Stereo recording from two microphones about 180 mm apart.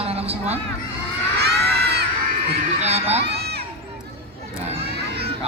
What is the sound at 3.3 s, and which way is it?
Crowd, 65° right (ahead or behind).